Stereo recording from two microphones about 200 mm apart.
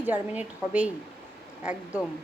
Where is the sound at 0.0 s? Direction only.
10° right (ahead or behind).